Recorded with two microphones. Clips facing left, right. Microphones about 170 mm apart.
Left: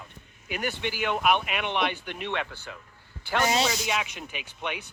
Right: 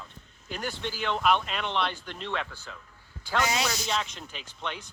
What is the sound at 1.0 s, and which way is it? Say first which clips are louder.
Speech: left 1 dB; 15° left (ahead or behind).